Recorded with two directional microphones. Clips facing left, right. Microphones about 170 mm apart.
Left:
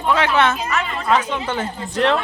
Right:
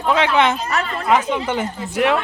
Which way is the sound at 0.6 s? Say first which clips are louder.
Right 1 dB; 40° right (ahead or behind).